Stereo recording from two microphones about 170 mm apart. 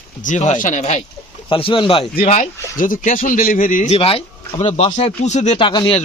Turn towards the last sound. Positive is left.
turn(degrees=30)  # may be behind; listen again after turning